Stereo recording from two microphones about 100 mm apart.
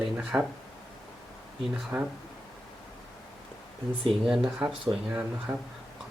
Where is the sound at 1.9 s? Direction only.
35° right (ahead or behind).